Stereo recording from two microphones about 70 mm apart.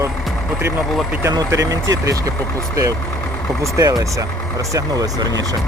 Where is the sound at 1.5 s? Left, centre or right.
Right.